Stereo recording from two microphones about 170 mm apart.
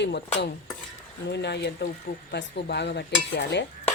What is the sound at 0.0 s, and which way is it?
Cutlery, 85° left.